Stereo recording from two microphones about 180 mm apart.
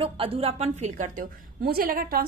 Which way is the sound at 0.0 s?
30° right (ahead or behind).